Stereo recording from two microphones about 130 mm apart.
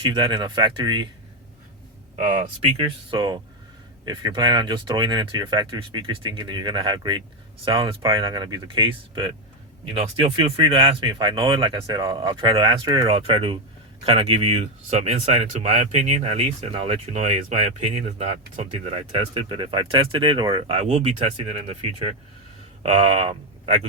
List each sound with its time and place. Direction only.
0.0 s speech: 35° right (ahead or behind)
2.1 s speech: 65° right (ahead or behind); by 9.3 s 40° right (ahead or behind)
9.9 s speech: 50° right (ahead or behind)
13.1 s speech: 50° right (ahead or behind)
17.1 s speech: 65° right (ahead or behind); by 20.7 s 40° right (ahead or behind)
20.7 s speech: 55° right (ahead or behind)
21.8 s speech: 40° right (ahead or behind)
22.8 s speech: 50° right (ahead or behind)